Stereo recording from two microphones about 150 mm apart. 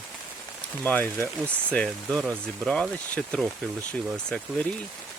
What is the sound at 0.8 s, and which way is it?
Speech, 10° left (ahead or behind).